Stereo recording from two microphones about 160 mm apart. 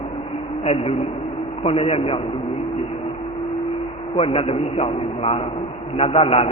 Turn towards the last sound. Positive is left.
turn(degrees=40)  # may be behind; listen again after turning